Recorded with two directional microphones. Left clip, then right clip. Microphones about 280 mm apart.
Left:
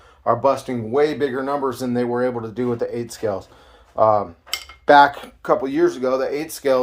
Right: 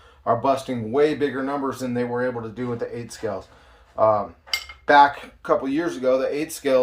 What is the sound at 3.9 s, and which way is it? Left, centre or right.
Cutlery, left.